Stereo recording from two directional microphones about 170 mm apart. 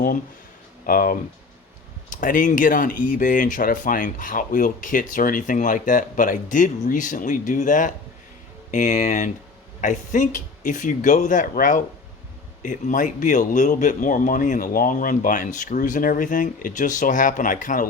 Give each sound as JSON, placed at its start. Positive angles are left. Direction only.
{"t": 0.9, "sound": "speech", "side_deg": 60}